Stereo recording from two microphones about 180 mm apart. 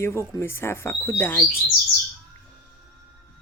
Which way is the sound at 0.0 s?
15° left (ahead or behind).